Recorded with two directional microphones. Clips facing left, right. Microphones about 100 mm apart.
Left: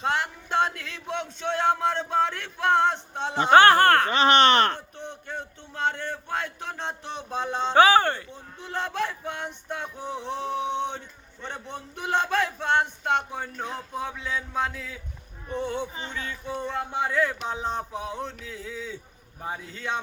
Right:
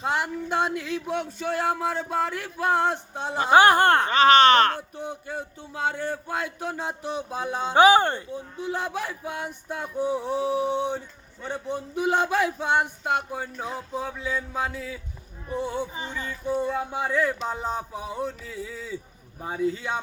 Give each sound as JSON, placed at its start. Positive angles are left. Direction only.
{"t": 0.0, "sound": "speech", "side_deg": -10}
{"t": 4.9, "sound": "speech", "side_deg": -5}
{"t": 11.4, "sound": "a sound", "side_deg": -5}